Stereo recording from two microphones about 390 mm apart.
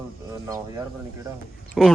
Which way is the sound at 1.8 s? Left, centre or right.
Centre.